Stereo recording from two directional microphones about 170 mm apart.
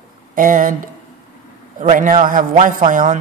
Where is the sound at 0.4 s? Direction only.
50° right (ahead or behind).